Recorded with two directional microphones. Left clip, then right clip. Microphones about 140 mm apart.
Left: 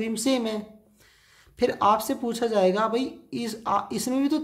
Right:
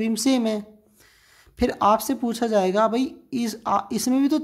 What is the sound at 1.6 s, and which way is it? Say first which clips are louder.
Speech: right 2 dB; 35° right (ahead or behind).